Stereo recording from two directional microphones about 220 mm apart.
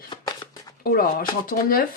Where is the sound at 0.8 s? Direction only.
40° left (ahead or behind).